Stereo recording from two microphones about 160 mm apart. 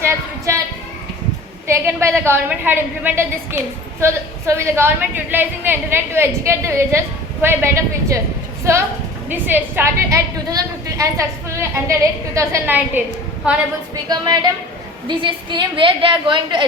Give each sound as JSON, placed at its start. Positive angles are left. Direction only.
{"t": 0.0, "sound": "a sound", "side_deg": -20}
{"t": 1.6, "sound": "a woman's voice", "side_deg": -15}
{"t": 14.1, "sound": "a woman's voice", "side_deg": -25}